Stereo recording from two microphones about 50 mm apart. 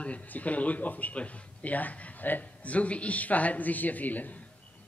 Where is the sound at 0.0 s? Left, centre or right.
Left.